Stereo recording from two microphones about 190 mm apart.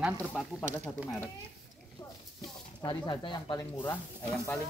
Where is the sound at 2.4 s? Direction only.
20° left (ahead or behind).